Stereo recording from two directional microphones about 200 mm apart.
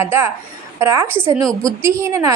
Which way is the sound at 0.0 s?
10° right (ahead or behind).